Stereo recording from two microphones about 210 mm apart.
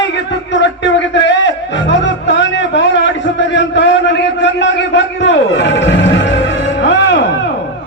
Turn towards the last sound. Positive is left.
turn(degrees=55)  # may be behind; listen again after turning